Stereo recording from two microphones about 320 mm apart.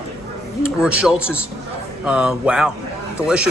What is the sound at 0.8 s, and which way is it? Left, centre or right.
A man's voice, centre.